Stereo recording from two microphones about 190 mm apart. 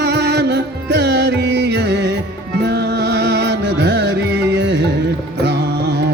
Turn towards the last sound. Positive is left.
turn(degrees=-60)  # may be behind; listen again after turning